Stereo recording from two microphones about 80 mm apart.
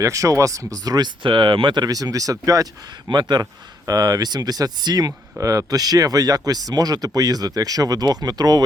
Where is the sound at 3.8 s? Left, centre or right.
Right.